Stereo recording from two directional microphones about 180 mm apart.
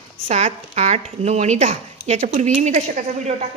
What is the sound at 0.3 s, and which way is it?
A woman's voice, 40° right (ahead or behind).